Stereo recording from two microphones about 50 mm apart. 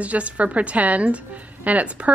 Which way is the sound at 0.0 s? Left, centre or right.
Right.